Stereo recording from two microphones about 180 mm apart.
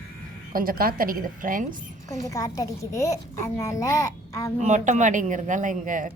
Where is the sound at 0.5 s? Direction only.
55° right (ahead or behind).